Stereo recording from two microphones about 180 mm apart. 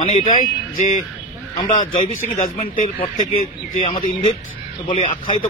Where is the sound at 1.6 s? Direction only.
30° left (ahead or behind).